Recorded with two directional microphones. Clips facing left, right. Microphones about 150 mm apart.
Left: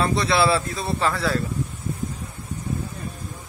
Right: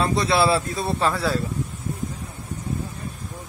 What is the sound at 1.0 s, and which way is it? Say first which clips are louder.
Speech: even; 5° right (ahead or behind).